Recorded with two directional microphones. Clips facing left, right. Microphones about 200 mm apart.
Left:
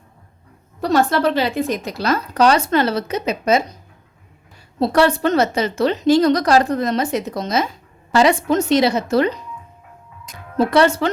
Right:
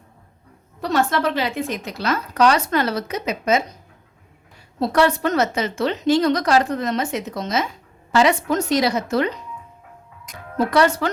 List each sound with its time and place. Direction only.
0.8 s a woman's voice: 35° left (ahead or behind)
4.8 s a woman's voice: 30° left (ahead or behind)
10.6 s a woman's voice: 25° left (ahead or behind)